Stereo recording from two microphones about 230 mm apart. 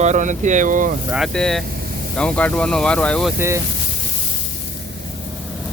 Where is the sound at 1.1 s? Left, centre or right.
Centre.